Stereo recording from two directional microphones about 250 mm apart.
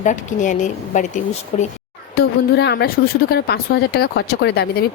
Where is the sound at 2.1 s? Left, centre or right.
Left.